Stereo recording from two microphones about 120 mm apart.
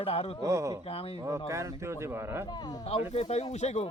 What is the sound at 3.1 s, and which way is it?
Speech, 60° left (ahead or behind).